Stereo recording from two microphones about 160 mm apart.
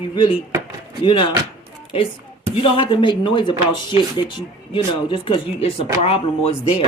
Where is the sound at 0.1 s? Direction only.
30° left (ahead or behind).